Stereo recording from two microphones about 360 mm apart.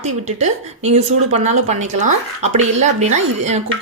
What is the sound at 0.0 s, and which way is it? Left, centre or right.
A woman's voice, centre.